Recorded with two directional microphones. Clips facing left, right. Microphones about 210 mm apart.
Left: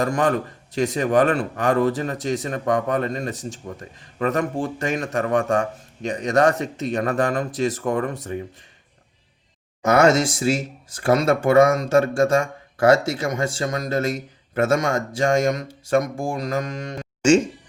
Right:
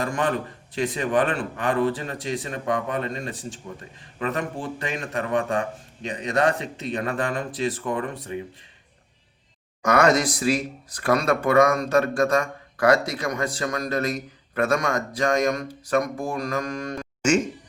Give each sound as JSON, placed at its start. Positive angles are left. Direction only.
{"t": 0.0, "sound": "a man's voice", "side_deg": 40}
{"t": 9.8, "sound": "speech", "side_deg": 25}